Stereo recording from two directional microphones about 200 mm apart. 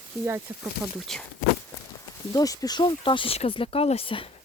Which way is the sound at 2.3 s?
20° left (ahead or behind).